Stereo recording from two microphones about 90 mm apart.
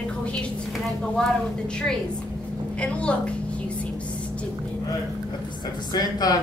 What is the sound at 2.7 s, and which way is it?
Speech, 10° left (ahead or behind).